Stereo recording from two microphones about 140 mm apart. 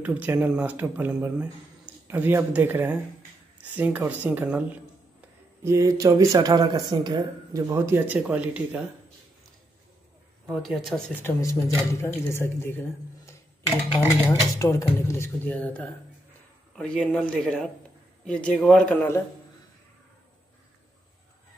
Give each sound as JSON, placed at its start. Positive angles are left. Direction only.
{"t": 0.0, "sound": "speech", "side_deg": -15}
{"t": 10.5, "sound": "speech", "side_deg": 0}
{"t": 11.2, "sound": "speech", "side_deg": 20}
{"t": 14.5, "sound": "speech", "side_deg": 25}